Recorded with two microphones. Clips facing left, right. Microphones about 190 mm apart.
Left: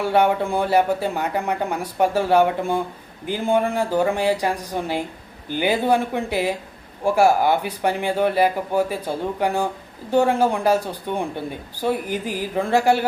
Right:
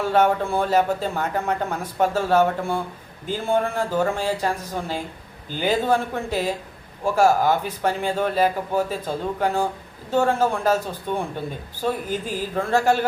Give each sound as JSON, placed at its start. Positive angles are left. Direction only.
{"t": 0.0, "sound": "speech", "side_deg": 15}